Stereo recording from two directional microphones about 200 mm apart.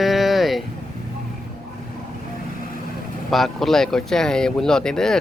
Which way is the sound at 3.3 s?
Centre (ahead or behind).